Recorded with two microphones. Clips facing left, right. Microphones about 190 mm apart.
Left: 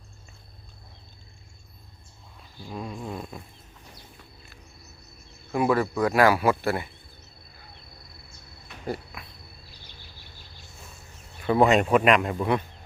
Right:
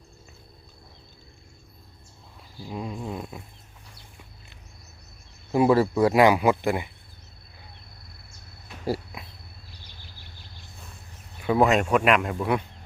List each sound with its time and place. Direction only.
2.6 s a sound: 10° right (ahead or behind)
5.5 s speech: 25° right (ahead or behind)
11.4 s speech: centre (ahead or behind)